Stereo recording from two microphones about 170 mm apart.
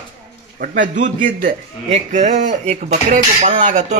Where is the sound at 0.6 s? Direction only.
50° right (ahead or behind).